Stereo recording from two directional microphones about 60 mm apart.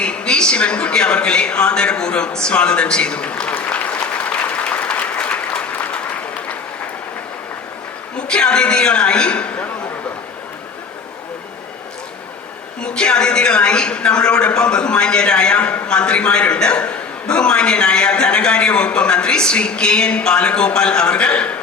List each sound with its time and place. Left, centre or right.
0.0 s a woman's voice: centre
3.7 s applause: left
8.3 s a woman's voice: centre
12.8 s a woman's voice: centre